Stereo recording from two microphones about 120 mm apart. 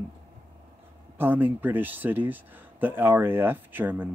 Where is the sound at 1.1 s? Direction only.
15° right (ahead or behind).